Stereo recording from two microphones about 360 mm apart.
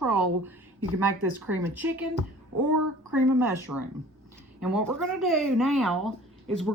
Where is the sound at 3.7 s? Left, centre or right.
Right.